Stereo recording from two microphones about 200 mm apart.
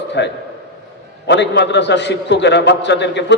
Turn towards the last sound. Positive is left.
turn(degrees=60)  # may be behind; listen again after turning